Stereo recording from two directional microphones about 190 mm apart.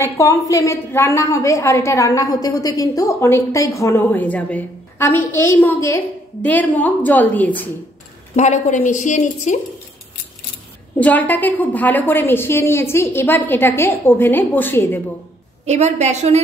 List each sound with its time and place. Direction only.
0.0 s a woman's voice: 15° left (ahead or behind)
8.4 s a woman's voice: 40° left (ahead or behind)
11.0 s a woman's voice: 10° left (ahead or behind)
15.6 s a woman's voice: 35° right (ahead or behind)